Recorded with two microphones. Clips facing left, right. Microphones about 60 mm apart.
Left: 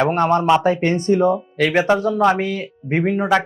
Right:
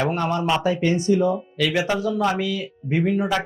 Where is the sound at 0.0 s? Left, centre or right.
Left.